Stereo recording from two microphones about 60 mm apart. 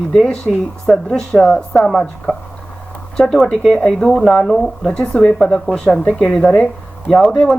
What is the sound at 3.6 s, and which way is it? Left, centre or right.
Speech, centre.